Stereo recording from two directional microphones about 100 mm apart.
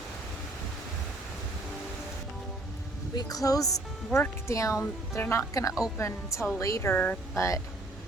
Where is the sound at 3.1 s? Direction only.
35° left (ahead or behind).